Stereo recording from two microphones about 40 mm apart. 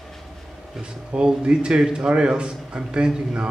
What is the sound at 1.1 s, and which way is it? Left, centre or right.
A man's voice, right.